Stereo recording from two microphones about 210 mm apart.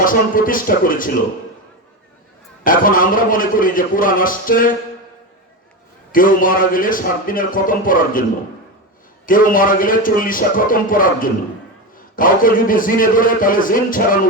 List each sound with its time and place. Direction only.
0.0 s a man's voice: 40° left (ahead or behind)
2.6 s a man's voice: 40° left (ahead or behind)
6.1 s a man's voice: 40° left (ahead or behind)
9.2 s a man's voice: 40° left (ahead or behind)